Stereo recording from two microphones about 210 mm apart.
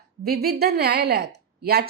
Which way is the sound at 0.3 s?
50° right (ahead or behind).